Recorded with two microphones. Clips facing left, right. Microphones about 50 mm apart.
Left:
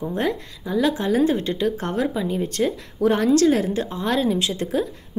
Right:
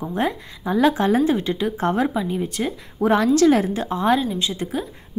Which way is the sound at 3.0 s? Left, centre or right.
Right.